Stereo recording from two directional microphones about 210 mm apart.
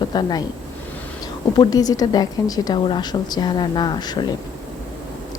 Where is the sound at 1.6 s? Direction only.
15° left (ahead or behind).